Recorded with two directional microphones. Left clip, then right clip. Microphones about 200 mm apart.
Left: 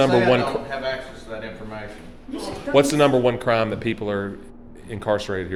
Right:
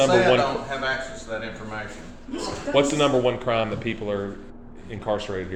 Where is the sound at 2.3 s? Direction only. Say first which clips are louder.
Left 3 dB; 45° left (ahead or behind).